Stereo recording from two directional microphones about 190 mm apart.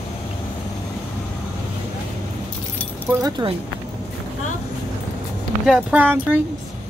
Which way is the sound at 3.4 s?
25° right (ahead or behind).